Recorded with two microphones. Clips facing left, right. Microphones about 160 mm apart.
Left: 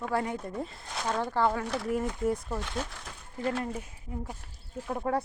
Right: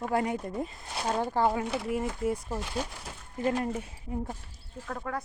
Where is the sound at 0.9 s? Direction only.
30° right (ahead or behind).